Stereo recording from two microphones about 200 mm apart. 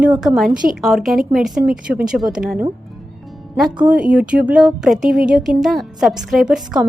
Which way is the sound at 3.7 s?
5° right (ahead or behind).